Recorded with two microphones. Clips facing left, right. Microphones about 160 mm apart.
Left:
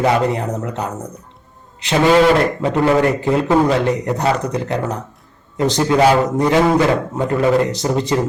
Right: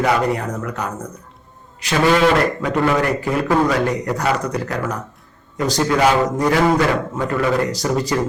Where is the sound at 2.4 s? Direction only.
25° left (ahead or behind).